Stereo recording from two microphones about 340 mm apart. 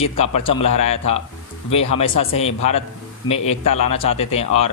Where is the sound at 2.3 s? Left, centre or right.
Centre.